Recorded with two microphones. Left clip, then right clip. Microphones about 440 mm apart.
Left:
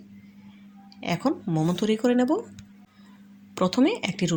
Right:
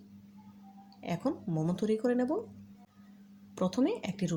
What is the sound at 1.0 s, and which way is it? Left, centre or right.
Speech, left.